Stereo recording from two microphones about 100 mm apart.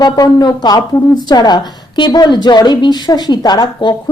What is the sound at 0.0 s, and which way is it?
A woman's voice, 40° left (ahead or behind).